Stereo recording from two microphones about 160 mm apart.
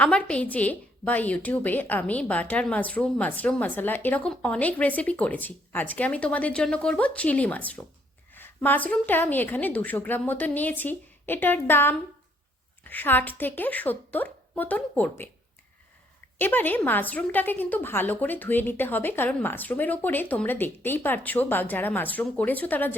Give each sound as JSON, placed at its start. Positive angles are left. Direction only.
{"t": 0.0, "sound": "a woman's voice", "side_deg": 5}
{"t": 16.4, "sound": "a woman's voice", "side_deg": 10}